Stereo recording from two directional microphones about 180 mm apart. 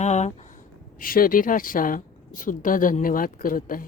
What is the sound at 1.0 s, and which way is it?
A woman's voice, 55° left (ahead or behind).